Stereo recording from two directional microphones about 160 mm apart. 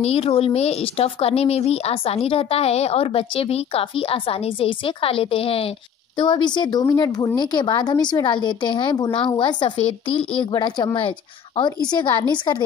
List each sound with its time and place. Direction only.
0.0 s a woman's voice: 40° left (ahead or behind)